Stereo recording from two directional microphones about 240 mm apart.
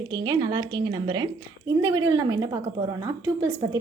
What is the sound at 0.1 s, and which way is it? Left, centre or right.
Speech, centre.